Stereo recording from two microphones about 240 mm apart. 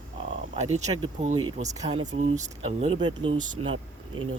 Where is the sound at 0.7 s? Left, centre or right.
Right.